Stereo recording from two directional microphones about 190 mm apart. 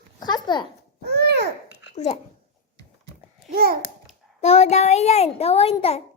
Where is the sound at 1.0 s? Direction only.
60° right (ahead or behind).